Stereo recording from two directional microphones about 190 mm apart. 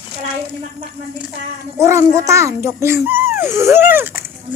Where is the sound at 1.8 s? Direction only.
15° right (ahead or behind).